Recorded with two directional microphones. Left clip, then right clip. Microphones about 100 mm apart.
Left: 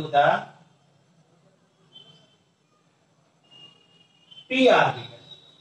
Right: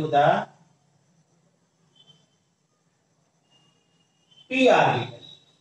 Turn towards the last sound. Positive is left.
turn(degrees=35)  # may be behind; listen again after turning